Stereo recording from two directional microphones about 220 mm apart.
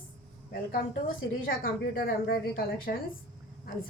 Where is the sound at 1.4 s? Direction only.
40° left (ahead or behind).